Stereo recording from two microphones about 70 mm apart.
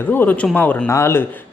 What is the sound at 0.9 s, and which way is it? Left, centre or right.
Speech, left.